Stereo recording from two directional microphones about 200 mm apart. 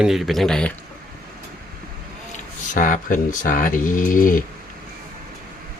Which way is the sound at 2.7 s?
40° left (ahead or behind).